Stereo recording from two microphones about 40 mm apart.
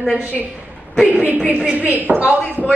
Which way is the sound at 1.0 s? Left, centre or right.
Right.